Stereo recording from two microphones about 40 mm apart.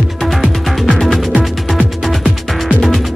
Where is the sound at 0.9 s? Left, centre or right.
Centre.